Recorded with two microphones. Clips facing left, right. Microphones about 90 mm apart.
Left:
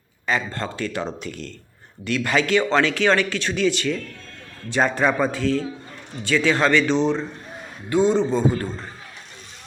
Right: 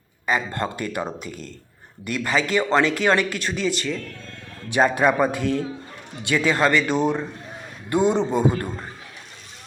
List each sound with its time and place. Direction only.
0.3 s speech: 10° right (ahead or behind)